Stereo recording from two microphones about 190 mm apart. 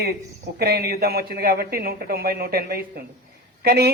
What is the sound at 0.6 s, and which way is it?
A man's voice, 55° right (ahead or behind).